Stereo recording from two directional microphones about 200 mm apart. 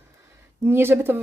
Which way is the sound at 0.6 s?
10° right (ahead or behind).